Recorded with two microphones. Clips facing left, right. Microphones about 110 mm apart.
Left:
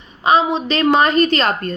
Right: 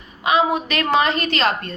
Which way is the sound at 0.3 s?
30° left (ahead or behind).